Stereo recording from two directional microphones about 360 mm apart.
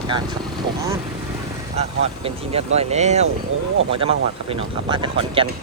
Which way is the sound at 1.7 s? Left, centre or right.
Centre.